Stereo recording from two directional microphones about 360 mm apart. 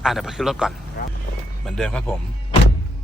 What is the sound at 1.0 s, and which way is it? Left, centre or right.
Speech, left.